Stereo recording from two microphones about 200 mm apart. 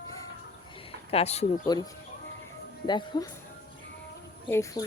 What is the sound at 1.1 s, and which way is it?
Speech, 30° left (ahead or behind).